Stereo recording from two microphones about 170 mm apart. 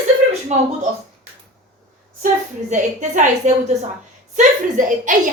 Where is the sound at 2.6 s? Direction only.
45° right (ahead or behind).